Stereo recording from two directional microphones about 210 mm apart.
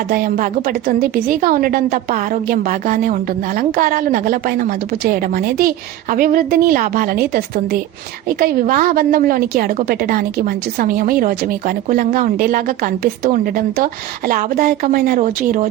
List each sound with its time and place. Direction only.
0.1 s a woman's voice: 40° right (ahead or behind)